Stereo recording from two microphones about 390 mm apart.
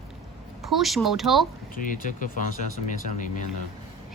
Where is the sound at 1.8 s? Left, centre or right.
Left.